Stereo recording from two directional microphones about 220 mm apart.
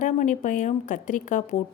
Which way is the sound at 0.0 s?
35° left (ahead or behind).